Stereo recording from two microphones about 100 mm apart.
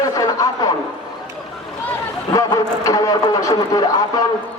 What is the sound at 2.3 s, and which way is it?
A man's voice, 35° left (ahead or behind).